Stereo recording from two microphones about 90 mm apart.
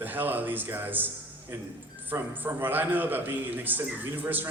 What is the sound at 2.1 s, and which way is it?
A man's voice, 20° right (ahead or behind).